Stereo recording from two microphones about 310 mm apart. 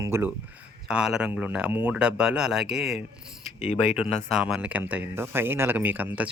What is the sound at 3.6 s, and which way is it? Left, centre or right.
Speech, left.